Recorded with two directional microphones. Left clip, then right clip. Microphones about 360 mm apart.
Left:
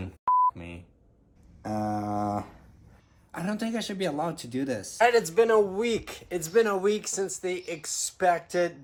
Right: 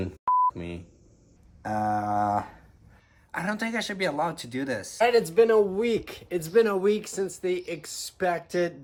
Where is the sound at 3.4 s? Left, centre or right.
Centre.